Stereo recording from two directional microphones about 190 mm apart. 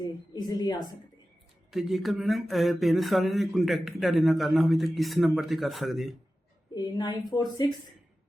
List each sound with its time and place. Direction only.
0.3 s a woman's voice: 20° left (ahead or behind)
1.7 s speech: centre (ahead or behind)
6.7 s a woman's voice: 20° left (ahead or behind)